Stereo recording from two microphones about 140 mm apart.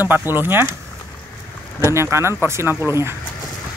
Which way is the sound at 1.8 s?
20° right (ahead or behind).